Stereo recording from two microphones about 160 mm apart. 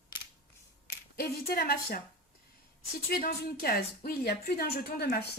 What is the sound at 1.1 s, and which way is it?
Speech, 75° left (ahead or behind).